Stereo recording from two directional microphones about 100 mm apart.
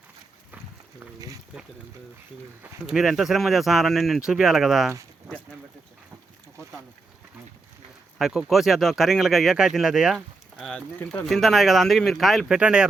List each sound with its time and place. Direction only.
1.5 s speech: centre (ahead or behind)
2.8 s speech: 5° right (ahead or behind)
8.2 s speech: centre (ahead or behind)
10.8 s speech: 10° left (ahead or behind); by 12.9 s 10° right (ahead or behind)